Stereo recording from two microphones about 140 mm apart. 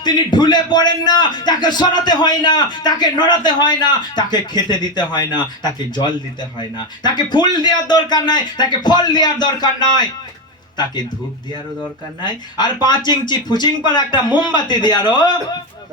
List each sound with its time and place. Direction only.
0.0 s a man's voice: 30° left (ahead or behind)
6.6 s a man's voice: 30° left (ahead or behind)
12.2 s a man's voice: 30° left (ahead or behind)